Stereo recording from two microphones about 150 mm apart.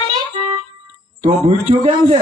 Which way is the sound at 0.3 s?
40° right (ahead or behind).